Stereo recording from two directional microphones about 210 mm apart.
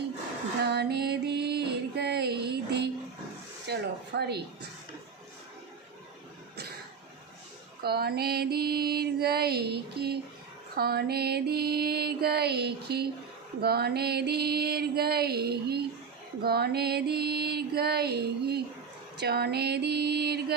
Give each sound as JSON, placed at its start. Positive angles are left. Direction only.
{"t": 0.6, "sound": "music", "side_deg": -50}
{"t": 3.7, "sound": "mantra", "side_deg": -50}
{"t": 7.8, "sound": "mantra", "side_deg": -50}